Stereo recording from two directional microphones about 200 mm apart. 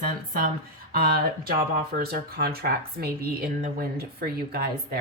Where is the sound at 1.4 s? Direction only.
50° right (ahead or behind).